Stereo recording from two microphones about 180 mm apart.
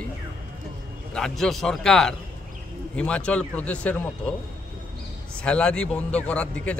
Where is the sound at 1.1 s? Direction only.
5° left (ahead or behind).